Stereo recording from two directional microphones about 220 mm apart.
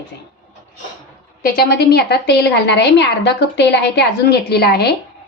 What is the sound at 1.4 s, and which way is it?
A woman's voice, 45° left (ahead or behind).